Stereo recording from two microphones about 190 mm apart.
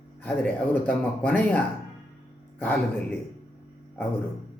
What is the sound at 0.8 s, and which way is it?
Speech, 5° left (ahead or behind).